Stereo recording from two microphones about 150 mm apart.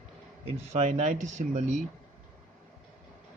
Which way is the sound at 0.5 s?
50° right (ahead or behind).